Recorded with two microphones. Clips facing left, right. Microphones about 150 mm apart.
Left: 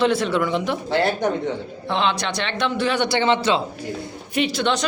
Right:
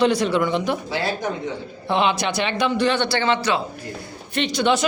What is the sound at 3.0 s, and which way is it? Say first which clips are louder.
Speech: left 2 dB; 20° left (ahead or behind).